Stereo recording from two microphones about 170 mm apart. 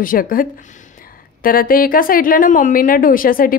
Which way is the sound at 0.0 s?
55° left (ahead or behind).